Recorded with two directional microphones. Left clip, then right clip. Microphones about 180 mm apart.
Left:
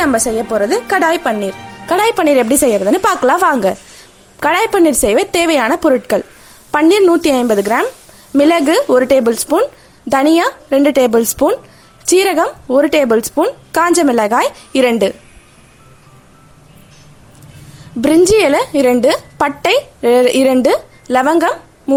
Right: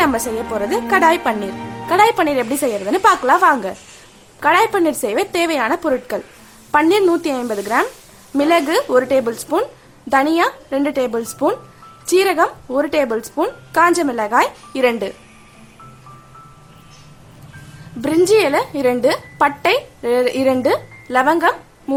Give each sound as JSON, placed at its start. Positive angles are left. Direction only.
{"t": 0.0, "sound": "a woman's voice", "side_deg": 20}
{"t": 18.0, "sound": "a woman's voice", "side_deg": 35}